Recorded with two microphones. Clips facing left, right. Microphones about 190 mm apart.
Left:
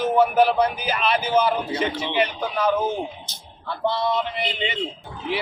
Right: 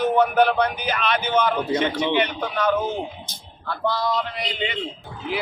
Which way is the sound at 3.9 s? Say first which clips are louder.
Left 1 dB; 25° left (ahead or behind).